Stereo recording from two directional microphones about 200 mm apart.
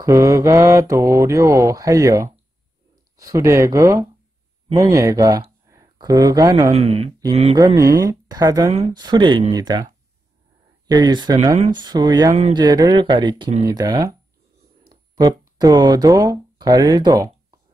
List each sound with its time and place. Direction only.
0.0 s a woman's voice: 15° right (ahead or behind)